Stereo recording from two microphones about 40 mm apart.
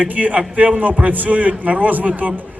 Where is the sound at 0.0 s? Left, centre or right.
Right.